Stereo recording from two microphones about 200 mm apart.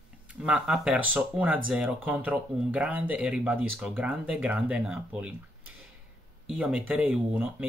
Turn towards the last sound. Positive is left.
turn(degrees=-5)  # may be behind; listen again after turning